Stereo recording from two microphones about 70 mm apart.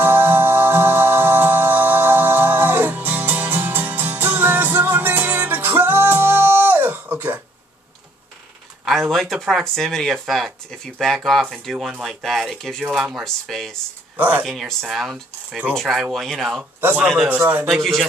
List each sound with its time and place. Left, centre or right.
0.0 s music: right
9.1 s speech: centre
13.2 s speech: centre
14.1 s speech: right
14.4 s speech: centre
15.7 s speech: centre
16.8 s a man's voice: right
17.6 s speech: centre